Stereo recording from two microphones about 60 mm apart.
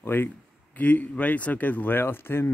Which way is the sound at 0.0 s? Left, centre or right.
Left.